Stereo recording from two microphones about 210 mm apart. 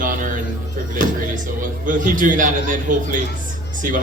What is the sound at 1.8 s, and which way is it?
A woman's voice, 40° right (ahead or behind).